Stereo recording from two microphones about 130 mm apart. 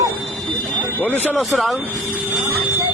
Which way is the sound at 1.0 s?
15° left (ahead or behind).